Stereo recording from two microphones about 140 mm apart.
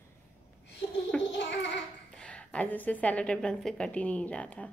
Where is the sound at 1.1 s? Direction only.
5° left (ahead or behind).